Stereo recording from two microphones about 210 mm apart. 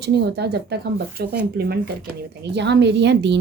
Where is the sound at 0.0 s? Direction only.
50° right (ahead or behind).